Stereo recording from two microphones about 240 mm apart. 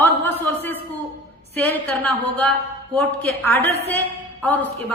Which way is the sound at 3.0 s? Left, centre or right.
Centre.